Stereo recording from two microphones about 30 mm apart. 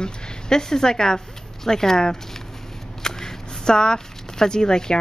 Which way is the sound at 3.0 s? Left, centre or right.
Left.